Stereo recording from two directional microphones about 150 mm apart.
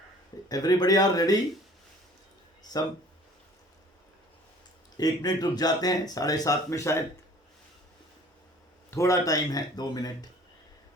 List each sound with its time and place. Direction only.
0.4 s speech: 25° left (ahead or behind)
4.9 s speech: 25° left (ahead or behind)
8.9 s speech: 20° left (ahead or behind)